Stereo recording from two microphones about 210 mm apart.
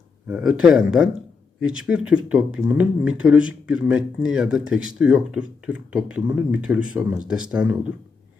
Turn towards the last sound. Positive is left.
turn(degrees=-5)  # may be behind; listen again after turning